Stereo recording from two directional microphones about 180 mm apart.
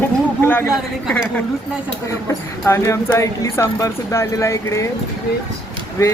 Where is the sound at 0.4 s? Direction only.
10° left (ahead or behind).